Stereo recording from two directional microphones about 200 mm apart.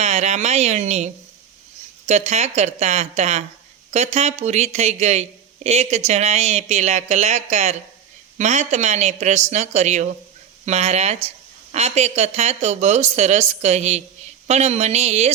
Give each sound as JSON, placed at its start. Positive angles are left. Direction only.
{"t": 0.0, "sound": "speech", "side_deg": -35}